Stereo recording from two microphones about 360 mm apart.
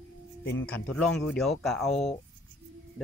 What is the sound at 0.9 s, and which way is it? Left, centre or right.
Speech, centre.